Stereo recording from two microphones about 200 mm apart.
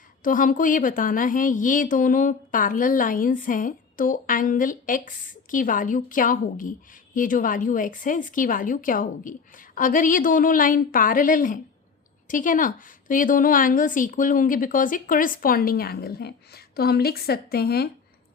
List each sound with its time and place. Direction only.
0.2 s a woman's voice: 40° left (ahead or behind)